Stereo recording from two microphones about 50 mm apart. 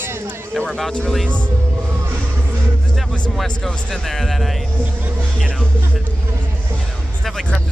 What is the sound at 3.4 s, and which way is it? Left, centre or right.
Speech, centre.